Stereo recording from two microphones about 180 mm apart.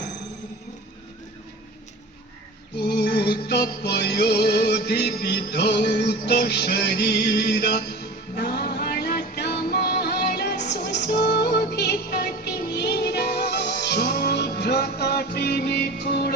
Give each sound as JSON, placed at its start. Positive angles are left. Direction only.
{"t": 2.7, "sound": "music", "side_deg": 65}